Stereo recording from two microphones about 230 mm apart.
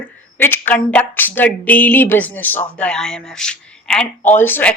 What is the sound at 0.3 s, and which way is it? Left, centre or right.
Speech, centre.